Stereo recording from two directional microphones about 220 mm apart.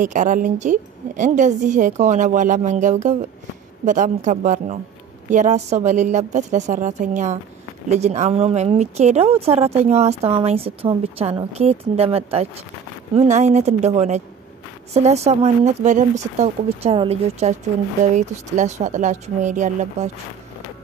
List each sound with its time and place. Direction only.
0.0 s a woman's voice: 35° right (ahead or behind)